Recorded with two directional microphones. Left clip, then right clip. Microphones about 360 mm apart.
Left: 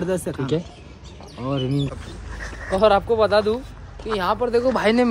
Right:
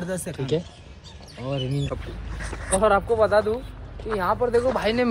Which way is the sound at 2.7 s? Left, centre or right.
Left.